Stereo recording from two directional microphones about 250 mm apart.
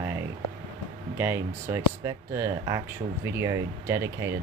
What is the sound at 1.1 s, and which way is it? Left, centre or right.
Speech, centre.